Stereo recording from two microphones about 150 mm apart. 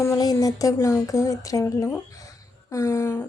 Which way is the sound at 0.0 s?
20° left (ahead or behind).